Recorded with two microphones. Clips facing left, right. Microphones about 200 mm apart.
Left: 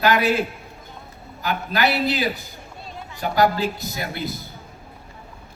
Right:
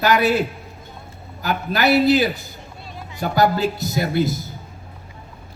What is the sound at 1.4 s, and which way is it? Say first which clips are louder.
A man's voice: right 2 dB; 45° right (ahead or behind).